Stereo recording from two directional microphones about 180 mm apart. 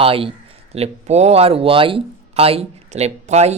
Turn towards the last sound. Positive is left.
turn(degrees=-40)  # may be behind; listen again after turning